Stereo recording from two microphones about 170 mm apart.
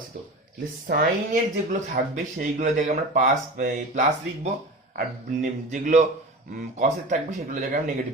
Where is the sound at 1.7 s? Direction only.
50° right (ahead or behind).